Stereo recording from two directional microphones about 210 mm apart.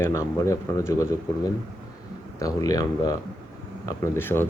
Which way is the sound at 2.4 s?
15° left (ahead or behind).